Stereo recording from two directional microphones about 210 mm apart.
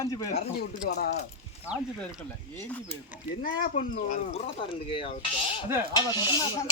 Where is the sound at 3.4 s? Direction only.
40° left (ahead or behind).